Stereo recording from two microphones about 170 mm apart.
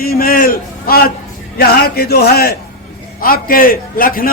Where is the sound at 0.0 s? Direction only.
60° left (ahead or behind).